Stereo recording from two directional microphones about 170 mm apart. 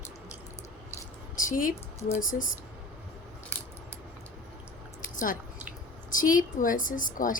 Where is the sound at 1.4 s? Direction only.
50° left (ahead or behind).